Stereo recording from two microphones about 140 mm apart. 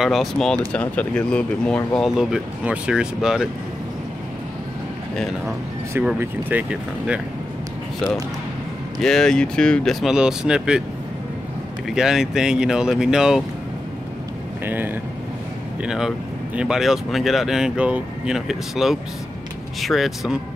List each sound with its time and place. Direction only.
0.0 s speech: centre (ahead or behind)
2.0 s speech: 5° right (ahead or behind)
6.1 s speech: 10° right (ahead or behind)
9.0 s speech: 5° left (ahead or behind)
11.9 s speech: 5° right (ahead or behind)
15.8 s speech: 5° right (ahead or behind)